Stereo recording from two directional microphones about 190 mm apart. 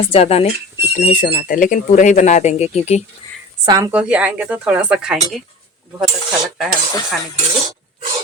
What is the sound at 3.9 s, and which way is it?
Speech, 5° right (ahead or behind).